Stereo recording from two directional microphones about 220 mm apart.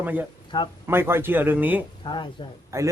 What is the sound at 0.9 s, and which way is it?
Speech, 10° right (ahead or behind).